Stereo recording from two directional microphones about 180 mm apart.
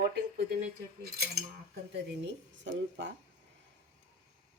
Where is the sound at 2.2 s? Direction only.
80° right.